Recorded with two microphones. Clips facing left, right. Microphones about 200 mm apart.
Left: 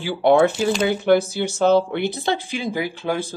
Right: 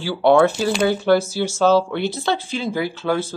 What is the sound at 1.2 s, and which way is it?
Speech, 55° left (ahead or behind).